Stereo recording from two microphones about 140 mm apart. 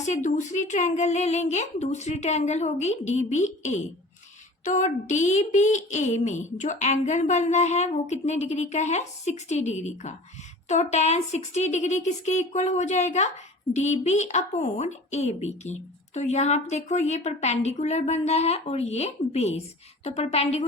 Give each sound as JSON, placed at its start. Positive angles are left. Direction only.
{"t": 0.0, "sound": "a woman's voice", "side_deg": 60}